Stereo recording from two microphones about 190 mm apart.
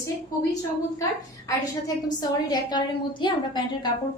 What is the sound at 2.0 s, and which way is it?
A woman's voice, 20° left (ahead or behind).